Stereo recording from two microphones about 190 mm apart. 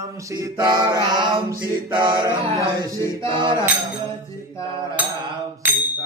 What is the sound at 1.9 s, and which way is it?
Mantra, 25° right (ahead or behind).